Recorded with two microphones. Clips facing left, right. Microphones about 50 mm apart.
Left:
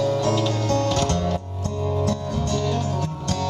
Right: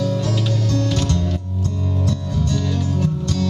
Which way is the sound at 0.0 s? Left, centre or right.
Left.